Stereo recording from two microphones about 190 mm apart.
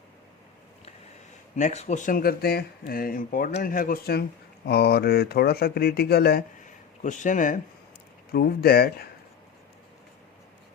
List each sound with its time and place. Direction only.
1.5 s speech: 40° left (ahead or behind); by 6.4 s 55° left (ahead or behind)
7.0 s speech: 40° left (ahead or behind)
8.3 s speech: 50° left (ahead or behind)